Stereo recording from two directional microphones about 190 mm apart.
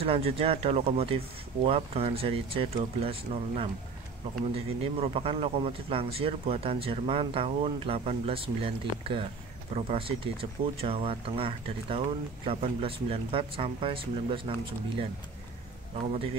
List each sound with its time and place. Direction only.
0.0 s a man's voice: 30° right (ahead or behind)